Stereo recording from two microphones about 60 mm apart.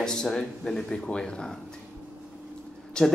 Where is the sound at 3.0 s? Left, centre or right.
Centre.